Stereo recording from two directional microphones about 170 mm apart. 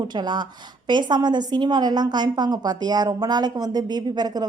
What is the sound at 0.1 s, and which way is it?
A woman's voice, 25° right (ahead or behind).